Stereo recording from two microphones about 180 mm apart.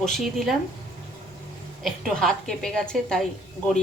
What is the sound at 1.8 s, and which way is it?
A woman's voice, centre (ahead or behind).